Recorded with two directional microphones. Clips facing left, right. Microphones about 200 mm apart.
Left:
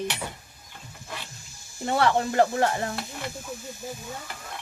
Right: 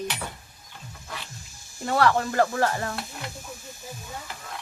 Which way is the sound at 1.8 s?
25° left (ahead or behind).